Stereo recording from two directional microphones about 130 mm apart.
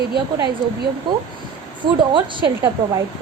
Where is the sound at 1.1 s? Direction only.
35° right (ahead or behind).